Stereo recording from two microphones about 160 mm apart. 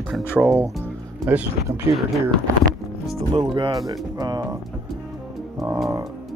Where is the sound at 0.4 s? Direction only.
5° right (ahead or behind).